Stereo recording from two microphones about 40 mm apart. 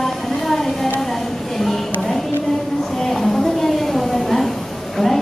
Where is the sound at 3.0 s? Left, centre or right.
Centre.